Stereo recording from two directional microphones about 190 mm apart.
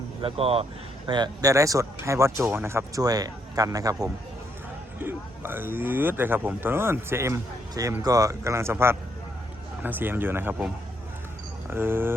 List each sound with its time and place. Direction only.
0.2 s speech: 30° right (ahead or behind); by 10.7 s 10° right (ahead or behind)
11.7 s speech: 10° right (ahead or behind)